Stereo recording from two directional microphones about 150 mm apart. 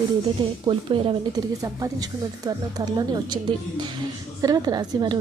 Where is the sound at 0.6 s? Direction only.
35° right (ahead or behind).